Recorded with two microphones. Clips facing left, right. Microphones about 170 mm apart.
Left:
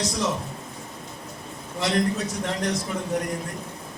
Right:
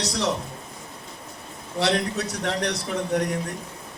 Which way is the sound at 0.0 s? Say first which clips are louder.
Even; 70° right (ahead or behind).